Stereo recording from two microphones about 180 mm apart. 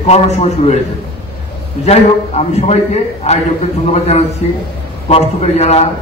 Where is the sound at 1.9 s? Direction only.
35° left (ahead or behind).